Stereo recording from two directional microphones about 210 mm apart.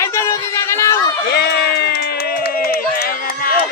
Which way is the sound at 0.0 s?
15° left (ahead or behind).